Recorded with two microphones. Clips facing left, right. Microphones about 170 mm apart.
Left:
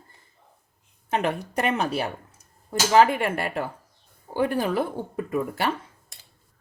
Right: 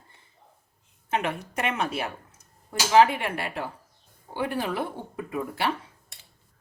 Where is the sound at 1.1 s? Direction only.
35° left (ahead or behind).